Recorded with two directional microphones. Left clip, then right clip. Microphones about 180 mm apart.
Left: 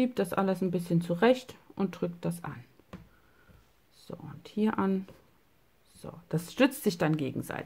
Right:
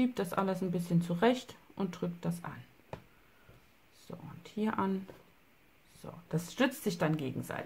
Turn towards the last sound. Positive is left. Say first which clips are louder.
# left 4 dB
turn(degrees=30)  # may be behind; listen again after turning